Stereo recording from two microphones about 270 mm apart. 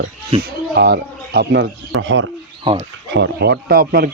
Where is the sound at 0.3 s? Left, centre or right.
Right.